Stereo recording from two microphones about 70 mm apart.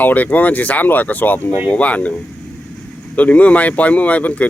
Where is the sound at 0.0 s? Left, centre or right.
Left.